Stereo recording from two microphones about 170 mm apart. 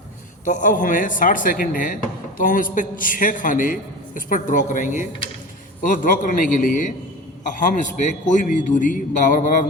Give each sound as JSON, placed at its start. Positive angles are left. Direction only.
{"t": 0.4, "sound": "a man's voice", "side_deg": 50}